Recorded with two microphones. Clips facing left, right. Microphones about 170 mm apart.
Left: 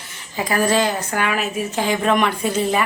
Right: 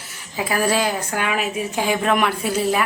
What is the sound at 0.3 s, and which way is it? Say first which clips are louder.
A woman's voice: left 2 dB; 5° right (ahead or behind).